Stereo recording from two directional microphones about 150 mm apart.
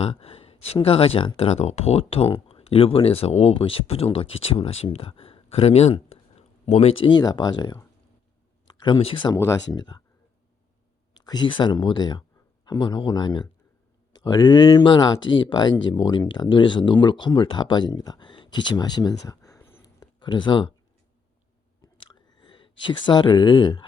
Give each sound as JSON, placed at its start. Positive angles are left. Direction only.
{"t": 0.0, "sound": "speech", "side_deg": 40}
{"t": 11.2, "sound": "speech", "side_deg": 30}
{"t": 22.4, "sound": "speech", "side_deg": 30}